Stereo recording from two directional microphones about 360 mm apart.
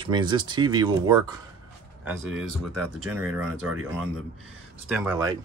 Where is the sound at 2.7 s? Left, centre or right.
Right.